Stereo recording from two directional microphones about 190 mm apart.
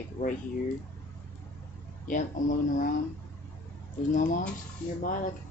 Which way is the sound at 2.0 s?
45° left (ahead or behind).